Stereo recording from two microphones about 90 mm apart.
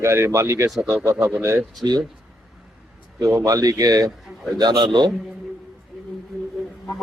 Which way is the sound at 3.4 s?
40° right (ahead or behind).